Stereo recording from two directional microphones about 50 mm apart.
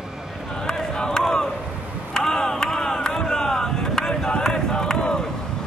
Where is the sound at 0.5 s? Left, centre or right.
Centre.